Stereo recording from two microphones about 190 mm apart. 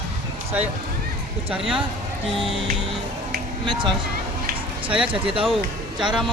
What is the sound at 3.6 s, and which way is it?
Speech, 25° right (ahead or behind).